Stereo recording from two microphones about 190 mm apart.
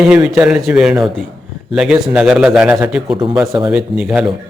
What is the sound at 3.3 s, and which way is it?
Speech, 20° right (ahead or behind).